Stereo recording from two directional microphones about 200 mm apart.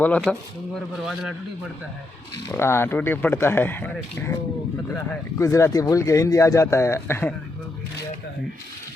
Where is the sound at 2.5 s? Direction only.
10° left (ahead or behind).